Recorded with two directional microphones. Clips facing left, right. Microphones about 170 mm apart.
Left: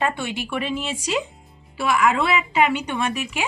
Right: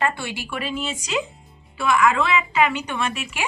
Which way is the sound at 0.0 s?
20° left (ahead or behind).